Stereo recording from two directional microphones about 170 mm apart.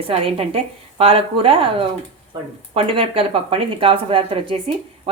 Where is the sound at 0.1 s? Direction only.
35° right (ahead or behind).